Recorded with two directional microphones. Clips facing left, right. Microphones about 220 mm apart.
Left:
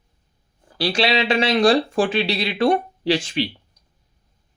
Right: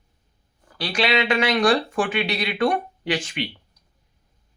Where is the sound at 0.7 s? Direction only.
30° left (ahead or behind).